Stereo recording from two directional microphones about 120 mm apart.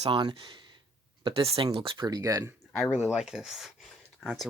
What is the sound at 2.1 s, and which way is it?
Speech, 30° right (ahead or behind).